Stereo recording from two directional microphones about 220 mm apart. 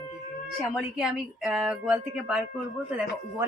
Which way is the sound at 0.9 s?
5° right (ahead or behind).